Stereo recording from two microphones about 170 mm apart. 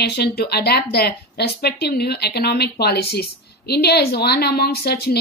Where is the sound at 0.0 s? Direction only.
70° left (ahead or behind).